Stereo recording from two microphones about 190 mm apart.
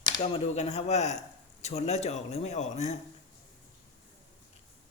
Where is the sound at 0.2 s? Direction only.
35° left (ahead or behind).